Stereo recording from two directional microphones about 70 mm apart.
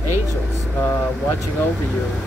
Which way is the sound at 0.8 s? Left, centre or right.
Left.